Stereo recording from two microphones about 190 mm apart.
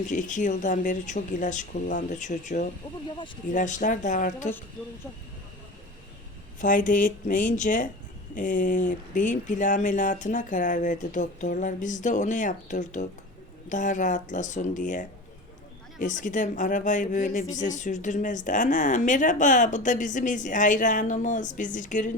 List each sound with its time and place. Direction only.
0.1 s speech: 40° left (ahead or behind)
6.6 s speech: 45° left (ahead or behind)